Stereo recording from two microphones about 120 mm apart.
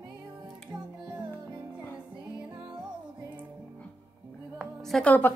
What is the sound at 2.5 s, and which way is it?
Music, 40° right (ahead or behind).